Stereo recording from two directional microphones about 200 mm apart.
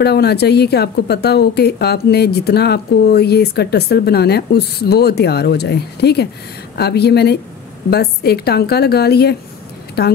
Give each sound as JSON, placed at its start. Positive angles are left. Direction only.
{"t": 0.0, "sound": "speech", "side_deg": 55}